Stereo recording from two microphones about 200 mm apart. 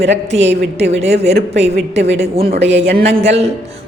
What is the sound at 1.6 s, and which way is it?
Speech, 30° right (ahead or behind).